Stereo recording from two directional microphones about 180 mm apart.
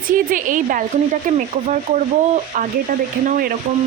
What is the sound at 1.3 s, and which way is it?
Speech, 40° right (ahead or behind).